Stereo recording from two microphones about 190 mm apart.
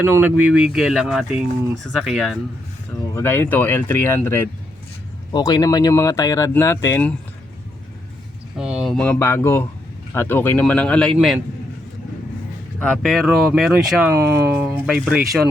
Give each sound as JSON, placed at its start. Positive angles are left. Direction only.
{"t": 0.0, "sound": "speech", "side_deg": -10}
{"t": 2.0, "sound": "speech", "side_deg": 0}
{"t": 8.5, "sound": "speech", "side_deg": -5}
{"t": 12.8, "sound": "speech", "side_deg": 5}
{"t": 14.1, "sound": "speech", "side_deg": -15}